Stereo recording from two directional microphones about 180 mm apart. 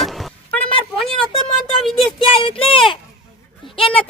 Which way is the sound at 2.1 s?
30° left (ahead or behind).